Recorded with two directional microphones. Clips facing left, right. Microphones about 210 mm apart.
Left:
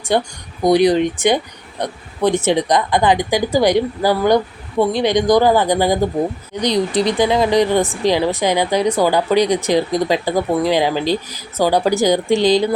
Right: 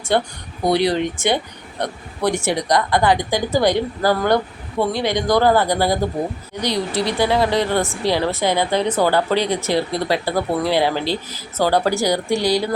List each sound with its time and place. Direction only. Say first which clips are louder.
0.6 s speech: left 5 dB; 15° left (ahead or behind)